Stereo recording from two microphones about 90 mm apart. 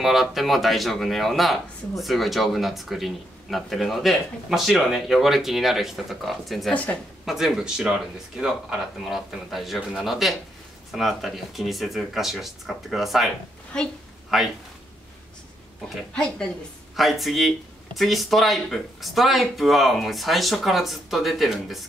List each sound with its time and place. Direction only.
0.0 s speech: centre (ahead or behind)
6.7 s a woman's voice: 15° left (ahead or behind)
7.2 s speech: 5° right (ahead or behind)
13.7 s a woman's voice: 10° left (ahead or behind)
14.3 s speech: centre (ahead or behind)
16.1 s a woman's voice: 10° left (ahead or behind)